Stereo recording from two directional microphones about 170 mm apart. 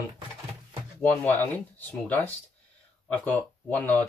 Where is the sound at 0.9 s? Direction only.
10° left (ahead or behind).